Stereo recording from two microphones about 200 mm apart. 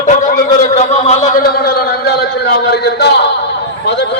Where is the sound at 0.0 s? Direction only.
40° left (ahead or behind).